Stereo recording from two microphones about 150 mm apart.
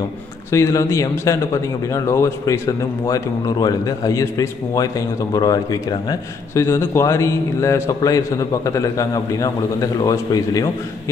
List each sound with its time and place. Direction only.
0.5 s speech: 20° left (ahead or behind)